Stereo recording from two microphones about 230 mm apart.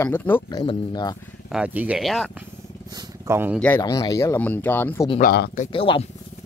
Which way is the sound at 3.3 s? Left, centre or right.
Centre.